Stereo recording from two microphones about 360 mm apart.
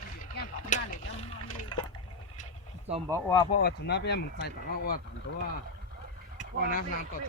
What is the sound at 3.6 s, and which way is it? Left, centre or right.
Speech, left.